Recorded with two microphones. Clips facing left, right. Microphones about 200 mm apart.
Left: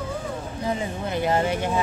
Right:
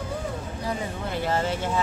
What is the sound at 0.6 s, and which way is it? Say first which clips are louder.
Speech: left 4 dB; 15° left (ahead or behind).